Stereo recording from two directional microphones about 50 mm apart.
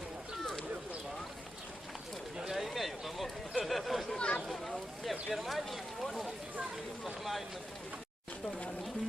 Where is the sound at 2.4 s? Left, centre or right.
Centre.